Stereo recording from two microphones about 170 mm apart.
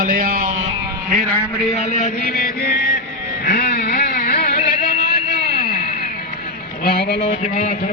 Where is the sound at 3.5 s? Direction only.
65° left (ahead or behind).